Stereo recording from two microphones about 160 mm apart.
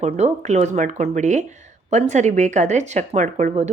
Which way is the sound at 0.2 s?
45° right (ahead or behind).